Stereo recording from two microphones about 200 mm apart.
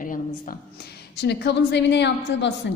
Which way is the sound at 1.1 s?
55° left (ahead or behind).